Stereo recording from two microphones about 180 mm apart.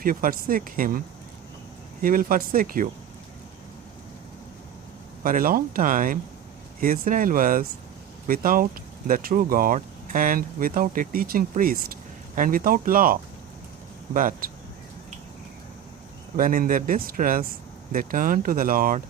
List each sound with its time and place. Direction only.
0.0 s speech: 50° right (ahead or behind)
5.2 s speech: 50° right (ahead or behind)
16.4 s speech: 50° right (ahead or behind)